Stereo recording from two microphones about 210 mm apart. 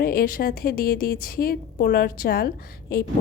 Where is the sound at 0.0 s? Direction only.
45° left (ahead or behind).